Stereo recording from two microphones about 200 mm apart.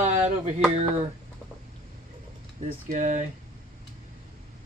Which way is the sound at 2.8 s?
40° right (ahead or behind).